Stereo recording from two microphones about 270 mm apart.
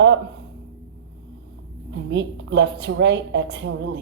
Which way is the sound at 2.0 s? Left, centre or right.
Right.